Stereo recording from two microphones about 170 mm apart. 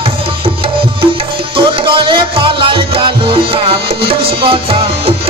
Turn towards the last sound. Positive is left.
turn(degrees=-35)  # may be behind; listen again after turning